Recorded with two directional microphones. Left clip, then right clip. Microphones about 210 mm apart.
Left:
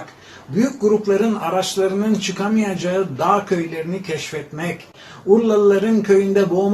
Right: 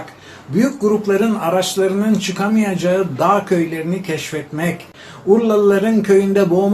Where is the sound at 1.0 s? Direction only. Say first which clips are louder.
Right 2 dB; 15° right (ahead or behind).